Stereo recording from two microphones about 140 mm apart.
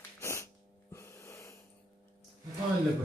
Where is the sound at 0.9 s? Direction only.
20° left (ahead or behind).